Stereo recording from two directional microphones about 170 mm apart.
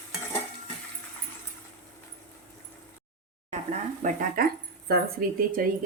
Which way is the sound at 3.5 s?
45° right (ahead or behind).